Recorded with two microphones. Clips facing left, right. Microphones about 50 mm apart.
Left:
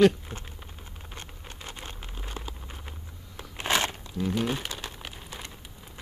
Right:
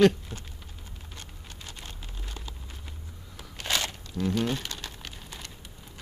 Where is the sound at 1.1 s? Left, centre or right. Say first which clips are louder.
Left 4 dB; left.